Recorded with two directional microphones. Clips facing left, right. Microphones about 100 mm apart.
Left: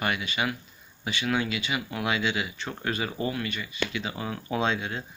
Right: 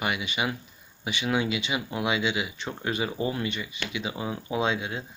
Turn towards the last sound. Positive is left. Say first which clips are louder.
# even
turn(degrees=-10)  # may be behind; listen again after turning